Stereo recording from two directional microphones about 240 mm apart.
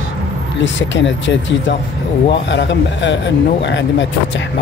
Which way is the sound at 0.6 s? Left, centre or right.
Left.